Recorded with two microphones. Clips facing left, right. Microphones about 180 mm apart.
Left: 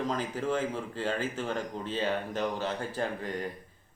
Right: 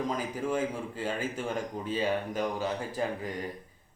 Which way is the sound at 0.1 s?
10° right (ahead or behind).